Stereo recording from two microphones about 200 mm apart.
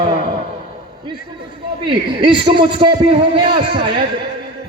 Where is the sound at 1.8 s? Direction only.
25° right (ahead or behind).